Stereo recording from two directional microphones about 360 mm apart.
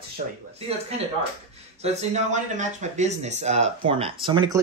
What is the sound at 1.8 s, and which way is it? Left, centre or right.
A woman's voice, centre.